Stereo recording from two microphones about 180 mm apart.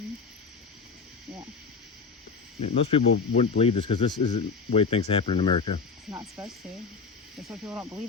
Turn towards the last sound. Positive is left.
turn(degrees=-15)  # may be behind; listen again after turning